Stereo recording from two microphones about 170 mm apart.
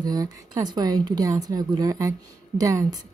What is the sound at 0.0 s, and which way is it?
Speech, 20° right (ahead or behind).